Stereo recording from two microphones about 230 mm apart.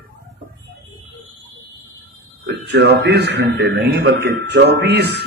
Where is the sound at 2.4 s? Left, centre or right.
Right.